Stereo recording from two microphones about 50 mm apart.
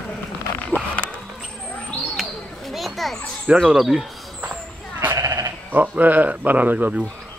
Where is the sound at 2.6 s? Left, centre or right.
Centre.